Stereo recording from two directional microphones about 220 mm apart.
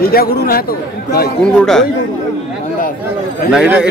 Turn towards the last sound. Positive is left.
turn(degrees=-5)  # may be behind; listen again after turning